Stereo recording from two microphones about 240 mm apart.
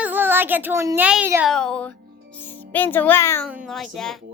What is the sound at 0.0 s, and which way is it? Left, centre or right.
A child's voice, centre.